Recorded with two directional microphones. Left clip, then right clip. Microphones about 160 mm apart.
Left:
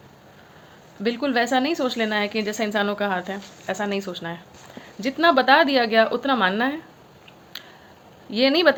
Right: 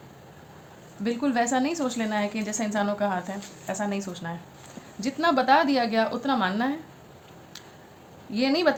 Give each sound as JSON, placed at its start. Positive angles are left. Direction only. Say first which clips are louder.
{"t": 1.0, "sound": "a woman's voice", "louder": "left 3 dB", "side_deg": 45}
{"t": 8.4, "sound": "a woman's voice", "louder": "left 6 dB", "side_deg": 45}